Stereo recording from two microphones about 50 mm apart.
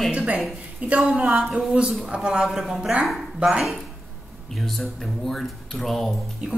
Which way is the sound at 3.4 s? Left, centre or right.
Centre.